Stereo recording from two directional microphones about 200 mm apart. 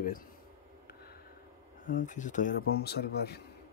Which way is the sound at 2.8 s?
55° left (ahead or behind).